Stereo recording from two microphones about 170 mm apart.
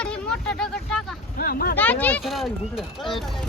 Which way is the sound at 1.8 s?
10° left (ahead or behind).